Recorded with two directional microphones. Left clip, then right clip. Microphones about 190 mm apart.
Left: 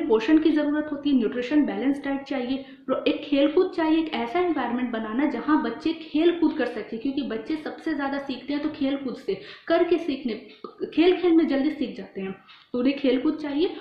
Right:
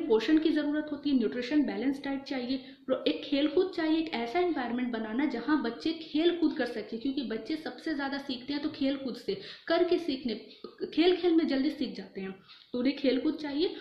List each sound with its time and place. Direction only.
0.1 s a woman's voice: 10° right (ahead or behind)
12.7 s a woman's voice: 10° right (ahead or behind)